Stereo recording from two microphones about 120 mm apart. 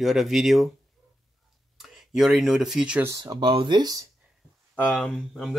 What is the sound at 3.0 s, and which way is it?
Speech, 30° right (ahead or behind).